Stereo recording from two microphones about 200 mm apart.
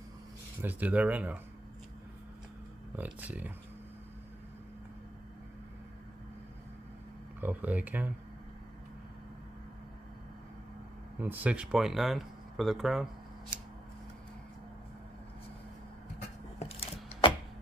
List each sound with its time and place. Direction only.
0.6 s speech: 10° right (ahead or behind)
3.0 s speech: 10° right (ahead or behind)
7.3 s speech: 10° right (ahead or behind)
11.1 s speech: 10° right (ahead or behind)
16.2 s a sound: 30° left (ahead or behind)